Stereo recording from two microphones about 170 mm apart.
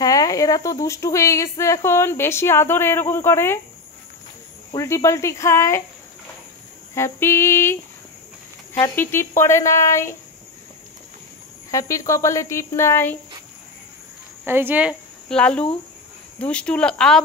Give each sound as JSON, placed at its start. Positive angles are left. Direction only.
{"t": 0.0, "sound": "speech", "side_deg": 20}
{"t": 4.7, "sound": "speech", "side_deg": 15}
{"t": 6.9, "sound": "speech", "side_deg": 15}
{"t": 11.7, "sound": "speech", "side_deg": 20}
{"t": 14.4, "sound": "speech", "side_deg": -10}
{"t": 15.2, "sound": "speech", "side_deg": 5}